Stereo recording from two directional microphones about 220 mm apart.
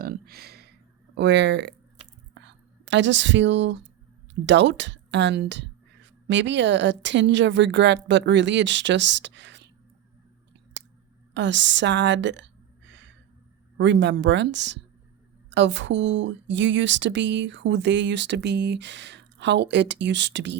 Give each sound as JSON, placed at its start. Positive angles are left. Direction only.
{"t": 0.0, "sound": "a sound", "side_deg": -45}
{"t": 1.1, "sound": "speech", "side_deg": -50}
{"t": 2.3, "sound": "whispering", "side_deg": -55}
{"t": 4.4, "sound": "speech", "side_deg": -55}
{"t": 11.3, "sound": "a woman's voice", "side_deg": -55}